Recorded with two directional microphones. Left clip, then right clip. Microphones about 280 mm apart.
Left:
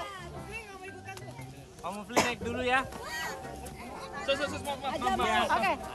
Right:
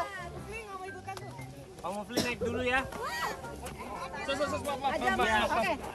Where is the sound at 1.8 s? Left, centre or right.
Centre.